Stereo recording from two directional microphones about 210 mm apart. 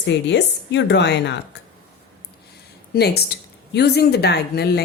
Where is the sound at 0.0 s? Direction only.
55° left (ahead or behind).